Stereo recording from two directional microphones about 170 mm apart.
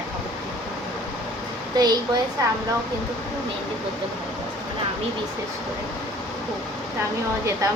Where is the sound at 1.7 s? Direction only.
25° right (ahead or behind).